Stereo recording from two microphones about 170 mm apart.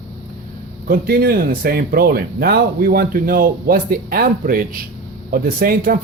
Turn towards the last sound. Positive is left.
turn(degrees=-60)  # may be behind; listen again after turning